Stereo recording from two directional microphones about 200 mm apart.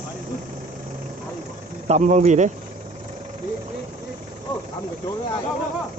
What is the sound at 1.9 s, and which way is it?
Speech, 35° right (ahead or behind).